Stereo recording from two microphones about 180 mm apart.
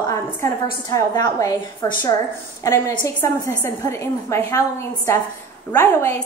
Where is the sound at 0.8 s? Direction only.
20° left (ahead or behind).